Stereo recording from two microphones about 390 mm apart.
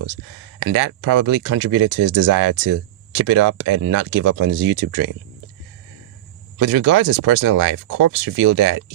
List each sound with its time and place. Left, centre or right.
0.6 s speech: right
6.6 s speech: right